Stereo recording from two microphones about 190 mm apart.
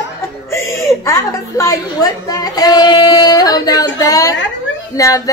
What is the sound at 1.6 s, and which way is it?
Speech, 20° left (ahead or behind).